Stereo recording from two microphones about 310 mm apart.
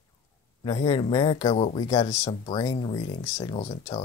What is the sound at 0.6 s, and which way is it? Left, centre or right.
Speech, centre.